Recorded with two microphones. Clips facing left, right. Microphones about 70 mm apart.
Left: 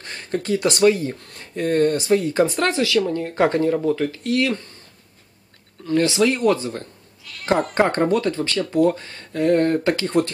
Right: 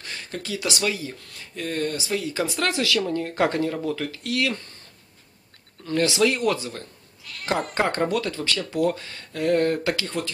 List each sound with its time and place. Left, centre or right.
0.0 s speech: left
2.6 s speech: left
3.4 s speech: left
5.9 s speech: left